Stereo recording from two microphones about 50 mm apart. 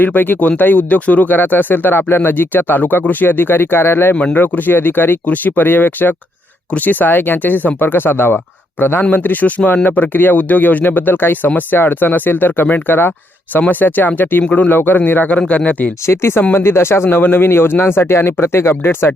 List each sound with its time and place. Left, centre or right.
0.0 s speech: left
4.1 s speech: left
4.4 s speech: left
14.4 s speech: left
14.7 s speech: left
16.0 s speech: left